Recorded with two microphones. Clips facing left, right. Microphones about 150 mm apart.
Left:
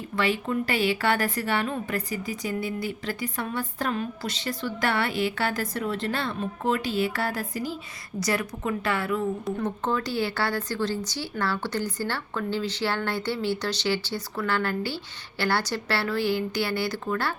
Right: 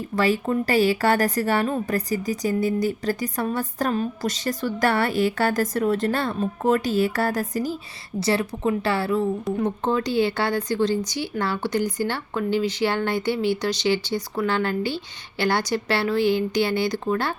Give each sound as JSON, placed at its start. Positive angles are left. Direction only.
{"t": 0.2, "sound": "a woman's voice", "side_deg": -40}
{"t": 8.2, "sound": "a woman's voice", "side_deg": -30}
{"t": 9.6, "sound": "speech", "side_deg": -15}